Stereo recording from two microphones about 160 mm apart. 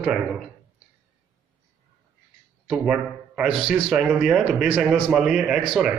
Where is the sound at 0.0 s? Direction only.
5° right (ahead or behind).